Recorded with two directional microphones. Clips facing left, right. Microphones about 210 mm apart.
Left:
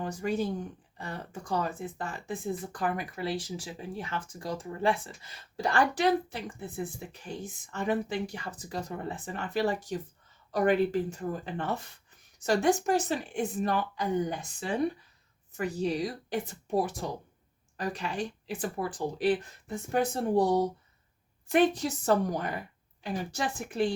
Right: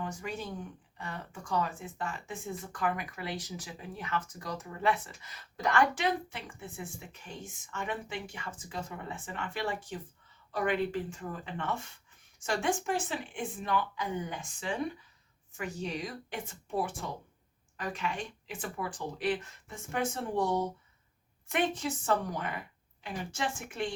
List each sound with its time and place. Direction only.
0.0 s speech: 35° left (ahead or behind)